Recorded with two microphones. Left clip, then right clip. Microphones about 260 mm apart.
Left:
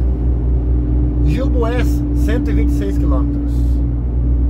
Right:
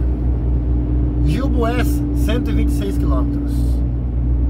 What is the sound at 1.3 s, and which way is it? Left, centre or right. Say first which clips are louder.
Vehicle: even; centre.